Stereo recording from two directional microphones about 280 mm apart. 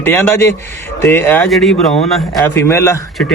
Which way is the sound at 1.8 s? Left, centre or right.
Left.